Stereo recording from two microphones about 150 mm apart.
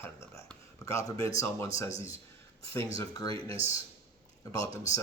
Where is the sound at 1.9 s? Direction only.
50° left (ahead or behind).